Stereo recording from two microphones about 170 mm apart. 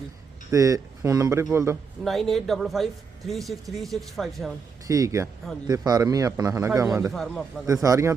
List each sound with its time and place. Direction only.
0.5 s a man's voice: 20° right (ahead or behind)
2.0 s a man's voice: centre (ahead or behind)
4.9 s a man's voice: 20° right (ahead or behind)
7.1 s a man's voice: centre (ahead or behind)
7.7 s a man's voice: 20° right (ahead or behind)